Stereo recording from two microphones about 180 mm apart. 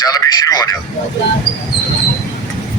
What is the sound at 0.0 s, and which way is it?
Speech, 20° left (ahead or behind).